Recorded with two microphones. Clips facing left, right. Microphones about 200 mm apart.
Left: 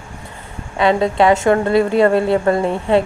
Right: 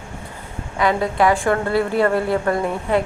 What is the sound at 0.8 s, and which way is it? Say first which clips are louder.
A woman's voice: left 4 dB; 25° left (ahead or behind).